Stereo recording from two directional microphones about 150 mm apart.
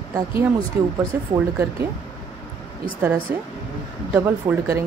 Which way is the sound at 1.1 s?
15° right (ahead or behind).